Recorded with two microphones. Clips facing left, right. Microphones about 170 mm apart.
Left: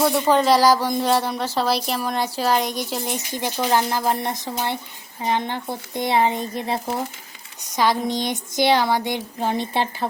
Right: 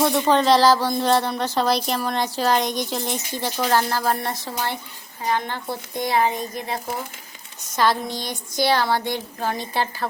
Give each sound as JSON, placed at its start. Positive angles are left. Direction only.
{"t": 0.0, "sound": "speech", "side_deg": 5}
{"t": 7.8, "sound": "speech", "side_deg": 15}